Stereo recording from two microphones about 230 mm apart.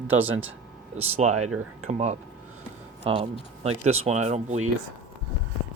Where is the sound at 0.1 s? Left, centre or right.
Right.